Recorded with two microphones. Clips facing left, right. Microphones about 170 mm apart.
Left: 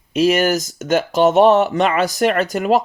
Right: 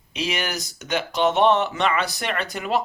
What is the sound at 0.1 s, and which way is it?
Speech, 45° left (ahead or behind).